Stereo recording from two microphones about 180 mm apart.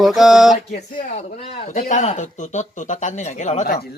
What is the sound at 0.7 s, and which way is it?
Speech, 45° left (ahead or behind).